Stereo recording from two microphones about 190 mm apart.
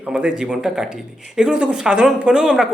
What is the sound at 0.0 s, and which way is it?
A woman's voice, 5° right (ahead or behind).